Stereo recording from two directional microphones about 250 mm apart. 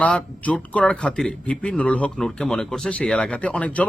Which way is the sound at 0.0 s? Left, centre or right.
Centre.